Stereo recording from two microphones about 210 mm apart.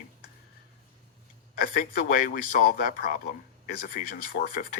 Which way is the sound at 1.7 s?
40° left (ahead or behind).